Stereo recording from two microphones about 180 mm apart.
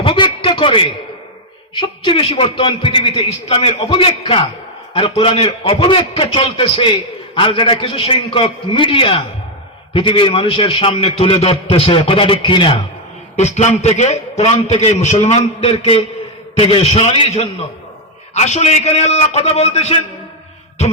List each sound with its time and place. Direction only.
0.0 s a sound: 25° left (ahead or behind)
1.7 s a man's voice: 25° left (ahead or behind)
13.3 s a man's voice: 40° left (ahead or behind)